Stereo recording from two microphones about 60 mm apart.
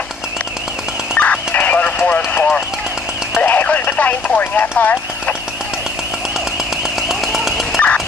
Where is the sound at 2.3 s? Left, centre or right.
Left.